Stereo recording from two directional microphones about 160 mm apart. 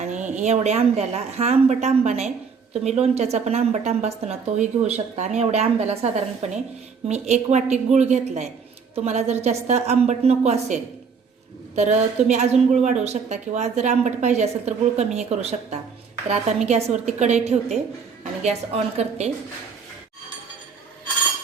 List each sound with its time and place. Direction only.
0.0 s a woman's voice: 50° right (ahead or behind)